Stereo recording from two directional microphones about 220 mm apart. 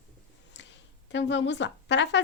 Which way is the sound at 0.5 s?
55° left (ahead or behind).